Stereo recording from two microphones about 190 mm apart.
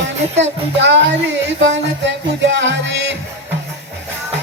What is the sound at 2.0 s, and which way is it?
Music, 70° right (ahead or behind).